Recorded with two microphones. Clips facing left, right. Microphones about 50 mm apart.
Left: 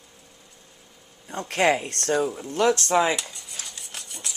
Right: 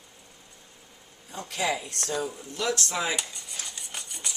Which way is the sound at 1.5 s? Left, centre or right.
Left.